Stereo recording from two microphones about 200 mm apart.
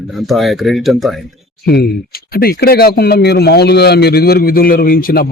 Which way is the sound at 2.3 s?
50° left (ahead or behind).